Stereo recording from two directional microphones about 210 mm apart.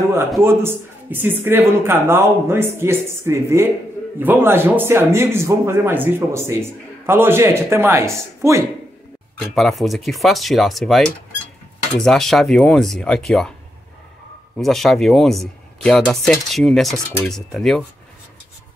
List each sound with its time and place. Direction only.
0.4 s speech: 10° right (ahead or behind)
9.6 s speech: centre (ahead or behind)
12.0 s speech: centre (ahead or behind)
14.6 s speech: centre (ahead or behind)